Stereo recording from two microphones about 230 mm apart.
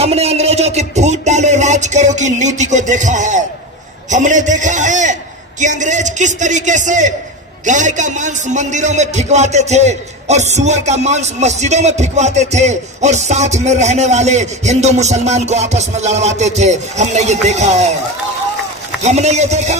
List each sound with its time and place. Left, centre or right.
0.0 s a sound: right
4.1 s a man's voice: right
19.0 s a man's voice: right